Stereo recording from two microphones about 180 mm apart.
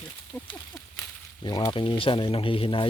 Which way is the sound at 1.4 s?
25° left (ahead or behind).